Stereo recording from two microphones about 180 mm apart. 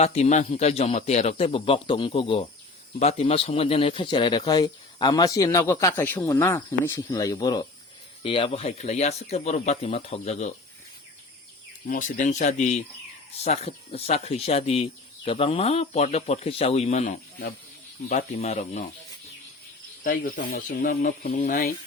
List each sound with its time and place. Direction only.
0.0 s speech: 35° left (ahead or behind)
11.9 s speech: 45° left (ahead or behind)
20.1 s speech: 50° left (ahead or behind)